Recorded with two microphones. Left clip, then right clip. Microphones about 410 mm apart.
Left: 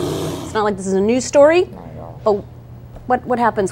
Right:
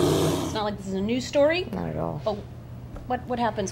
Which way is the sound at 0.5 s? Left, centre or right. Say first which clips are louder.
Left 11 dB; left.